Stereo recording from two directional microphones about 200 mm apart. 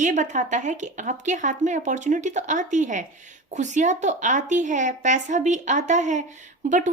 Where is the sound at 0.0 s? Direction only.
40° right (ahead or behind).